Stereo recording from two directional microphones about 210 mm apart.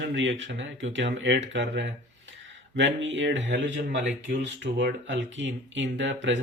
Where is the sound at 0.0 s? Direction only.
60° right (ahead or behind).